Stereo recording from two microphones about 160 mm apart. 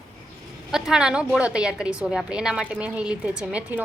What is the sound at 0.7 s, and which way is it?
A woman's voice, 5° right (ahead or behind).